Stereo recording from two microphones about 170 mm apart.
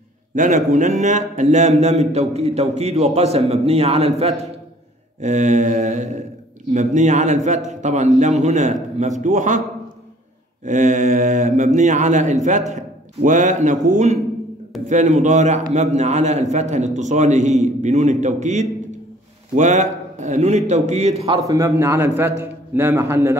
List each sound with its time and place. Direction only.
0.4 s a man's voice: 50° right (ahead or behind)
10.6 s a man's voice: 45° right (ahead or behind)
21.3 s a man's voice: 20° right (ahead or behind)